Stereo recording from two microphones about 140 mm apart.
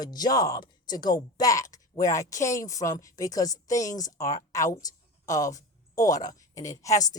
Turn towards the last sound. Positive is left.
turn(degrees=25)  # may be behind; listen again after turning